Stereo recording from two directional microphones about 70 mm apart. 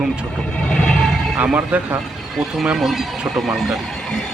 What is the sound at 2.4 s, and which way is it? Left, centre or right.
Speech, centre.